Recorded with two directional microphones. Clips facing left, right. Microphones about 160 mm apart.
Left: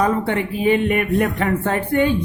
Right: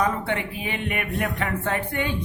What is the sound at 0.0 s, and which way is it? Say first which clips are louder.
Speech: left 6 dB; 35° left (ahead or behind).